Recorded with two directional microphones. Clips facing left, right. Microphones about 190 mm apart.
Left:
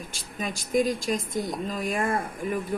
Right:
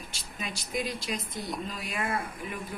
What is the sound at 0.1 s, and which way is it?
Speech, 45° left (ahead or behind).